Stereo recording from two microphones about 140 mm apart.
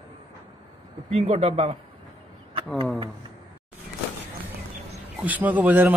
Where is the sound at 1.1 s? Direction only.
50° right (ahead or behind).